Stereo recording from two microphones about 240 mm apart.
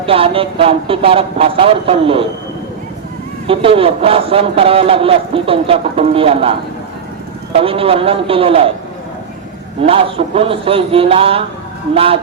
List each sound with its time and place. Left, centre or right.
0.0 s a man's voice: right
3.4 s a man's voice: right
9.8 s a man's voice: right